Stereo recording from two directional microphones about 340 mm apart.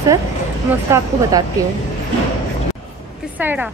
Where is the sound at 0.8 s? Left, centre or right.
Centre.